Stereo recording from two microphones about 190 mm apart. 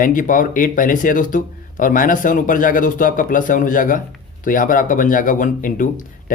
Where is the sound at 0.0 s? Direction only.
45° left (ahead or behind).